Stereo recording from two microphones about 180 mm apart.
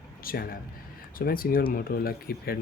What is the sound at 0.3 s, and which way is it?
Speech, 55° left (ahead or behind).